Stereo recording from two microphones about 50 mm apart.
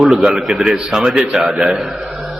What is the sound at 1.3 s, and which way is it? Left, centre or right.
Speech, right.